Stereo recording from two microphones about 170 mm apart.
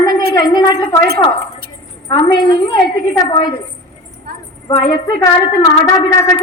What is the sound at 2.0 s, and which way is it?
Speech, 20° left (ahead or behind).